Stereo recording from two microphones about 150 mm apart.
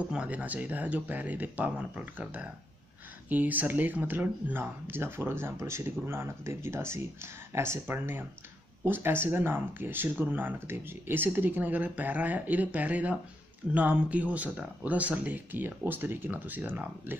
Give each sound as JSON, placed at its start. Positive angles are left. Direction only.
{"t": 0.1, "sound": "speech", "side_deg": -10}